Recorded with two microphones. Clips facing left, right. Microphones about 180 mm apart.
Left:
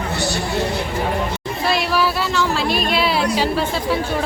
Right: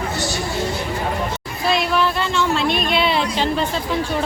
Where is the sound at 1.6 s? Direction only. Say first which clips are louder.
Right 1 dB; 5° left (ahead or behind).